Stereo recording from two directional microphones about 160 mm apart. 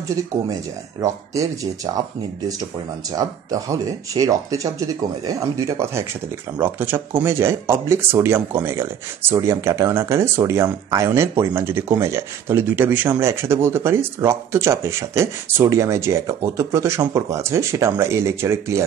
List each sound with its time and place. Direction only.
1.0 s speech: 20° right (ahead or behind)
3.2 s speech: 20° right (ahead or behind)